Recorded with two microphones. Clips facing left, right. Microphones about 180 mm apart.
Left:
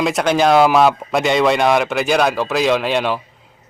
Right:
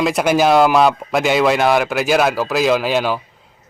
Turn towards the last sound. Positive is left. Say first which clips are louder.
# right 1 dB
turn(degrees=0)  # may be behind; listen again after turning